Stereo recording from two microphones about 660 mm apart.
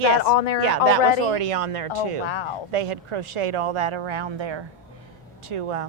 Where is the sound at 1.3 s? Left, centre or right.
Right.